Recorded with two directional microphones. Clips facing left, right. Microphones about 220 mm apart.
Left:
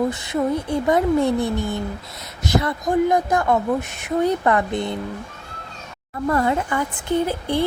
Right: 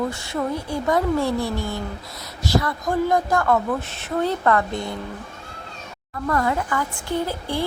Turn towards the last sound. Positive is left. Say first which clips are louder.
# left 4 dB
turn(degrees=20)  # may be behind; listen again after turning